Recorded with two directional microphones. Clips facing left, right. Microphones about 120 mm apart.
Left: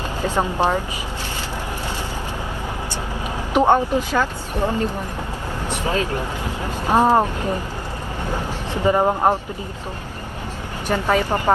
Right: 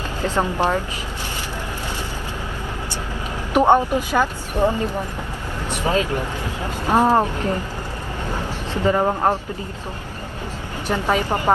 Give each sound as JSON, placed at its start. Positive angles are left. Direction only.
{"t": 0.2, "sound": "speech", "side_deg": 15}
{"t": 3.5, "sound": "speech", "side_deg": -15}
{"t": 5.9, "sound": "speech", "side_deg": -25}
{"t": 6.4, "sound": "speech", "side_deg": 15}
{"t": 8.7, "sound": "speech", "side_deg": 15}
{"t": 10.9, "sound": "speech", "side_deg": -15}